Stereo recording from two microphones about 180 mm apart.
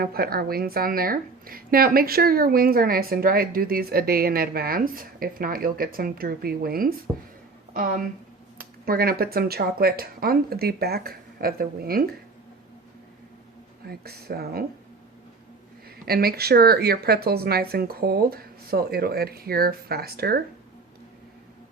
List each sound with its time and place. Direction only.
0.0 s a woman's voice: 55° right (ahead or behind)
13.8 s speech: 60° right (ahead or behind)
16.0 s speech: 60° right (ahead or behind)